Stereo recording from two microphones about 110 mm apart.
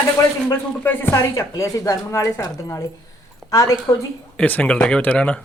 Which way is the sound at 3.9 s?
25° left (ahead or behind).